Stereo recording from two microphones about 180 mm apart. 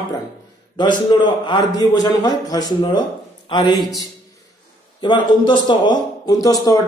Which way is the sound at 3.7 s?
Centre (ahead or behind).